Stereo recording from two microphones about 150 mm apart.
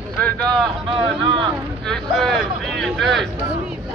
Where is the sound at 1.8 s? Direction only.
5° left (ahead or behind).